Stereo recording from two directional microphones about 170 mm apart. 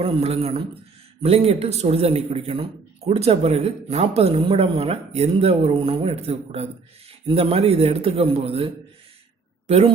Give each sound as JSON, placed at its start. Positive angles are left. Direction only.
{"t": 0.0, "sound": "speech", "side_deg": -35}